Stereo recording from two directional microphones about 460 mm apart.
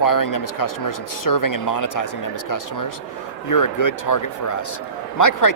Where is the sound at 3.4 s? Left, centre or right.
Left.